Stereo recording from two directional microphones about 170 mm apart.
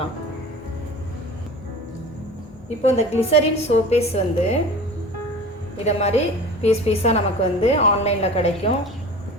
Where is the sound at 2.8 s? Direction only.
40° left (ahead or behind).